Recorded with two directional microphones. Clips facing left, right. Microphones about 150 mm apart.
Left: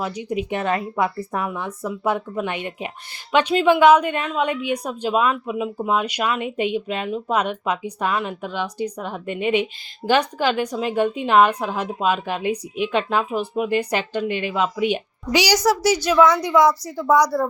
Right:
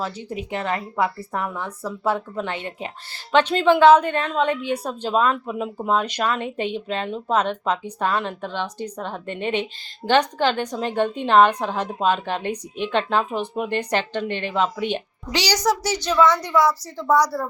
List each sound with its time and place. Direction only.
0.0 s a woman's voice: 15° left (ahead or behind)